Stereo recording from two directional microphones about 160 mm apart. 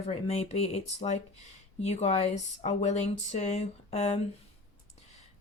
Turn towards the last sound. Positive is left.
turn(degrees=40)  # may be behind; listen again after turning